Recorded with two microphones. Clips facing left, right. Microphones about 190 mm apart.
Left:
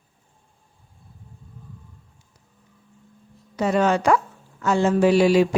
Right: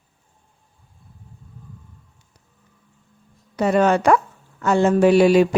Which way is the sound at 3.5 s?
60° right (ahead or behind).